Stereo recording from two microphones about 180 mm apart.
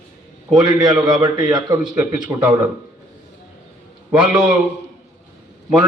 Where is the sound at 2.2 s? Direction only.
5° right (ahead or behind).